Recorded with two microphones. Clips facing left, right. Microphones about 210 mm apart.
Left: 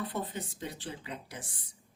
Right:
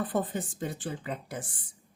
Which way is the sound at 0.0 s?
50° right (ahead or behind).